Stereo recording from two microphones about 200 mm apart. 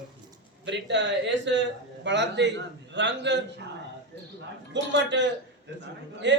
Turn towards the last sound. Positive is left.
turn(degrees=-60)  # may be behind; listen again after turning